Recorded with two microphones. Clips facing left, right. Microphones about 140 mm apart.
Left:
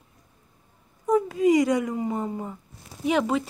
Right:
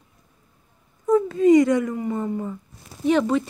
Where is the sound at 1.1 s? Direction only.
15° left (ahead or behind).